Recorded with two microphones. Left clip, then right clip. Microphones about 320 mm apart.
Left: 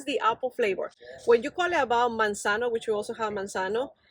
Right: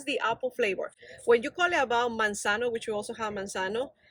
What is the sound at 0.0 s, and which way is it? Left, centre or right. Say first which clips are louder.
Speech: left 3 dB; centre.